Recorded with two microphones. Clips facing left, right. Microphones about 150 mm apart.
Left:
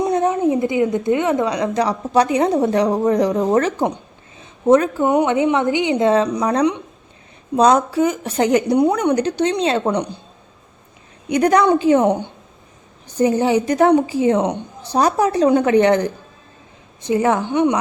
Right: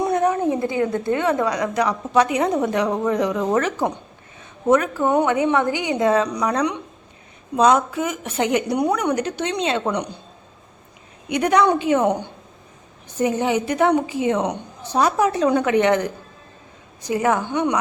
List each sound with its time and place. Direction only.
0.0 s a woman's voice: 25° left (ahead or behind)
5.0 s a woman's voice: 15° left (ahead or behind)
11.3 s a woman's voice: 40° left (ahead or behind); by 17.7 s 20° left (ahead or behind)